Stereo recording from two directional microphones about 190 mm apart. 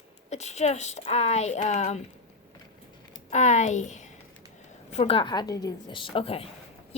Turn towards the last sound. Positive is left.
turn(degrees=30)  # may be behind; listen again after turning